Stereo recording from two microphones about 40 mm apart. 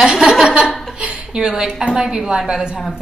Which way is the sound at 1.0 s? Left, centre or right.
Right.